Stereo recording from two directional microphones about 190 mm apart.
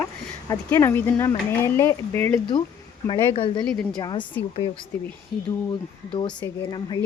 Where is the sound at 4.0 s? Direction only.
20° left (ahead or behind).